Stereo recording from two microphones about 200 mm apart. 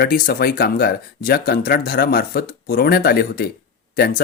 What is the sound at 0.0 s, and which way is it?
Speech, 50° left (ahead or behind).